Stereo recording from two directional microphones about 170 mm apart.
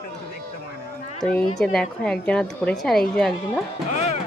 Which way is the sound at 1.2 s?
5° left (ahead or behind).